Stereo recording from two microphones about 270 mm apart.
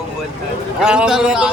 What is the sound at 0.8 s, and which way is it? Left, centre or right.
Speech, centre.